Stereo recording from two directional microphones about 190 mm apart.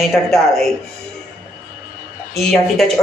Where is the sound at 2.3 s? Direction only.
Centre (ahead or behind).